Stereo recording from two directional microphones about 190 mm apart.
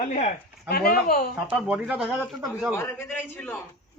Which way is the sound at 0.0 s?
40° left (ahead or behind).